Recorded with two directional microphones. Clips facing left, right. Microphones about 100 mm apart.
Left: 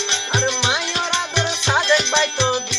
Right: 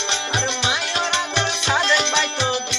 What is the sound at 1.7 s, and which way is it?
Music, 25° left (ahead or behind).